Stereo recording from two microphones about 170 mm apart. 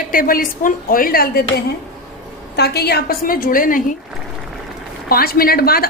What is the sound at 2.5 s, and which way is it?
A woman's voice, 70° left (ahead or behind).